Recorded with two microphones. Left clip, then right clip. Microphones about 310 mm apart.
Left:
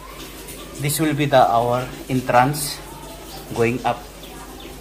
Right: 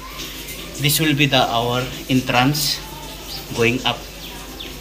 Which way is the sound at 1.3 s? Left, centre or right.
Centre.